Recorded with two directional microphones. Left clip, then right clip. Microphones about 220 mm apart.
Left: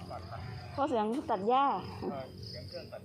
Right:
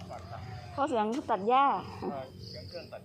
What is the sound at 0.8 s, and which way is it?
Speech, 5° right (ahead or behind).